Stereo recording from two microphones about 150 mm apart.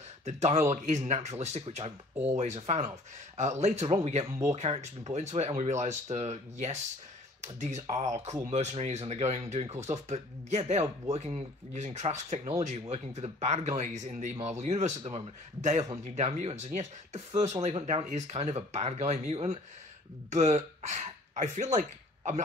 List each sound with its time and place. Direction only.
0.2 s speech: 50° right (ahead or behind)